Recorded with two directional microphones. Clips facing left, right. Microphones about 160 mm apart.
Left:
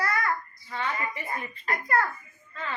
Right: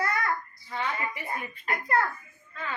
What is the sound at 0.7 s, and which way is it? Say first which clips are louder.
A woman's voice: even; 10° right (ahead or behind).